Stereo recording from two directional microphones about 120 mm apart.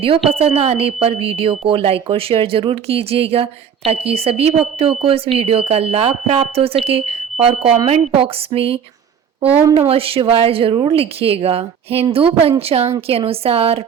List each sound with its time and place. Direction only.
0.3 s a woman's voice: 55° right (ahead or behind)